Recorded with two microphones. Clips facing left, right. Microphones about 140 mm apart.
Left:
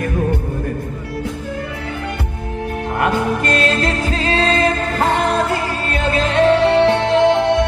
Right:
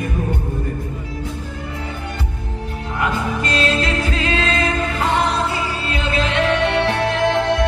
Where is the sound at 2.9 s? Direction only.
60° left (ahead or behind); by 5.1 s 40° left (ahead or behind).